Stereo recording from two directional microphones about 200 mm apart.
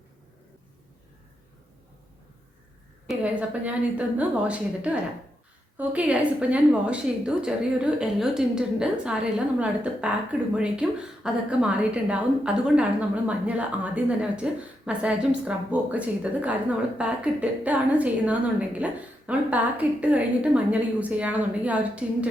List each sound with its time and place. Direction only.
3.6 s a woman's voice: 5° right (ahead or behind)